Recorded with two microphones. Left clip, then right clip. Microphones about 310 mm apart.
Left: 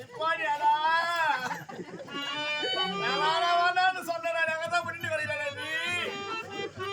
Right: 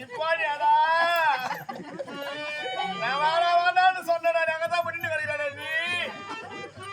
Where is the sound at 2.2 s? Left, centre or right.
Centre.